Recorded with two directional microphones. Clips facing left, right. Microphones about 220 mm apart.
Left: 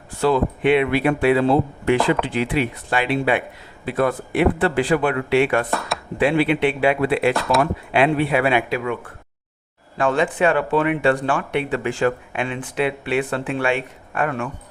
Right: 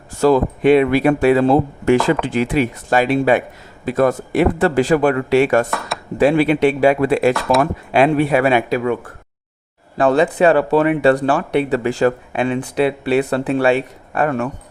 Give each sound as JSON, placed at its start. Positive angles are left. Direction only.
{"t": 0.2, "sound": "speech", "side_deg": -40}
{"t": 10.0, "sound": "speech", "side_deg": -35}